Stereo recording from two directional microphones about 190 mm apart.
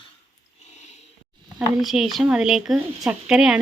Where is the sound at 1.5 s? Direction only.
Centre (ahead or behind).